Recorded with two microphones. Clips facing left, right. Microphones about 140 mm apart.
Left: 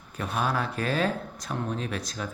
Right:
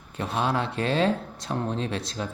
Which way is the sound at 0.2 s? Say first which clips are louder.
Right 2 dB; 25° right (ahead or behind).